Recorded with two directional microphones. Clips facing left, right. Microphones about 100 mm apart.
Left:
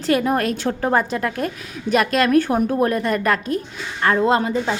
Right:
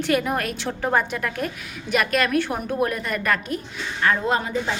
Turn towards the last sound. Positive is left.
turn(degrees=30)  # may be behind; listen again after turning